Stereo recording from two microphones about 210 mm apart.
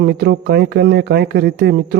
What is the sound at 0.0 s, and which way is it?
Speech, 55° right (ahead or behind).